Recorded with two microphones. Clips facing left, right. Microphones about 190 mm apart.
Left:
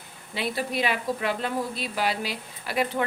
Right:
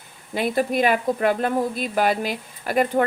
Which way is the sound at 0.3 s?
50° right (ahead or behind).